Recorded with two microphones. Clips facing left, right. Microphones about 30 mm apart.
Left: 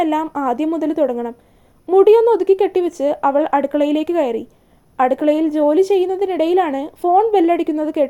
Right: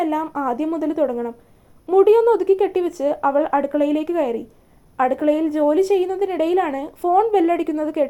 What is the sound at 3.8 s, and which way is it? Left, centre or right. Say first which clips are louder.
Speech: left 3 dB; left.